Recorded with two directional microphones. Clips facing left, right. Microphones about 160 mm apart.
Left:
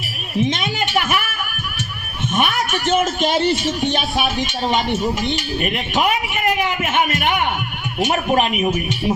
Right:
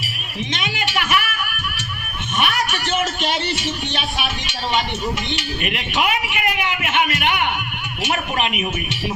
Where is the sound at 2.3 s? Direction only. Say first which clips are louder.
Left 2 dB; 45° left (ahead or behind).